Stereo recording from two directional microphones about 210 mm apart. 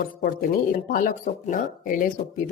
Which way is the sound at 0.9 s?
40° left (ahead or behind).